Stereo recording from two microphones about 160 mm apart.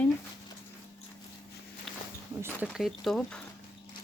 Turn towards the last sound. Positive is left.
turn(degrees=5)  # may be behind; listen again after turning